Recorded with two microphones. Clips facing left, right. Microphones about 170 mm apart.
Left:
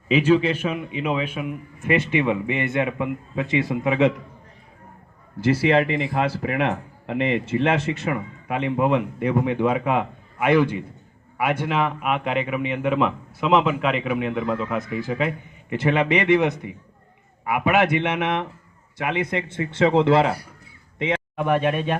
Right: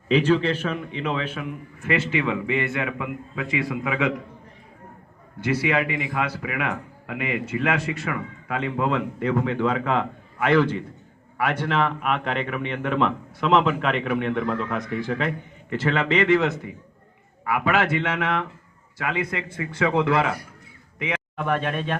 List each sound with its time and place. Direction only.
0.1 s speech: 10° left (ahead or behind); by 4.1 s 25° left (ahead or behind)
5.4 s a man's voice: 30° left (ahead or behind)
21.3 s a man's voice: 15° left (ahead or behind)